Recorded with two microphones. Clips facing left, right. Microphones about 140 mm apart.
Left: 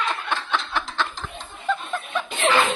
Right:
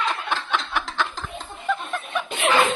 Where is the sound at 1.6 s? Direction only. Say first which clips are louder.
Left 1 dB; 10° right (ahead or behind).